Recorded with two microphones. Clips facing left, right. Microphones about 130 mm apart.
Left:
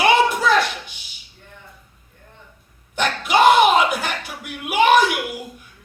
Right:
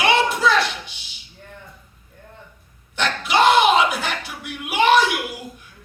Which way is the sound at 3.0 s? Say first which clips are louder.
Left 2 dB; 45° left (ahead or behind).